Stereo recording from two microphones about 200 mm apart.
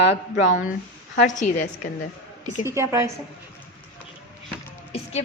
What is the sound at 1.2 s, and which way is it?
Speech, 40° left (ahead or behind).